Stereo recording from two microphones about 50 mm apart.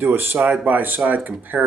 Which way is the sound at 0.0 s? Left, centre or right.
Right.